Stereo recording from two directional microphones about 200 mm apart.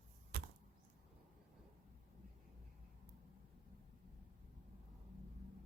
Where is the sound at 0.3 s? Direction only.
50° right (ahead or behind).